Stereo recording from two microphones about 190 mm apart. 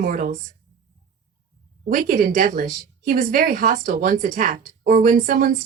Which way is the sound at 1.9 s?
45° right (ahead or behind).